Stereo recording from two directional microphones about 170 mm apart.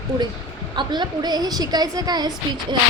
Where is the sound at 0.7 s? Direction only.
25° right (ahead or behind).